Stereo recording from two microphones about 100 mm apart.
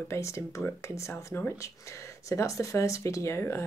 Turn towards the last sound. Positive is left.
turn(degrees=25)  # may be behind; listen again after turning